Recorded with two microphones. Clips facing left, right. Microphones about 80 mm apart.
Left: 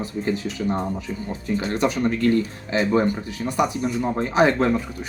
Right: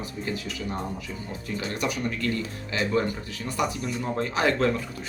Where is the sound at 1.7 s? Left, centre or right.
Left.